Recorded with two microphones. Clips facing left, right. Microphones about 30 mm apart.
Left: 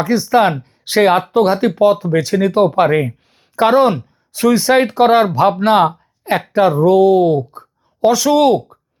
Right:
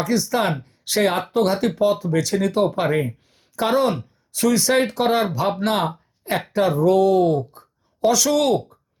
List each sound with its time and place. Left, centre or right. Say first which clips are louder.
0.0 s speech: left 8 dB; left
1.3 s speech: left 6 dB; centre
6.8 s speech: left 4 dB; centre
7.5 s a sound: left 11 dB; left
8.1 s speech: left 7 dB; centre